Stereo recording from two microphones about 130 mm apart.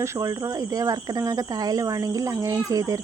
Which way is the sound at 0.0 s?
25° right (ahead or behind).